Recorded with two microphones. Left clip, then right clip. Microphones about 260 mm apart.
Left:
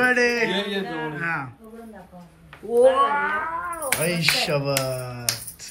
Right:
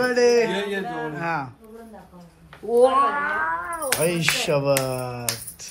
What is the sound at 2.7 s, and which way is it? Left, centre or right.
Speech, right.